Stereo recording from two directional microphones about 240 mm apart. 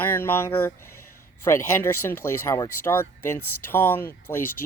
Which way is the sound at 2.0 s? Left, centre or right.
Centre.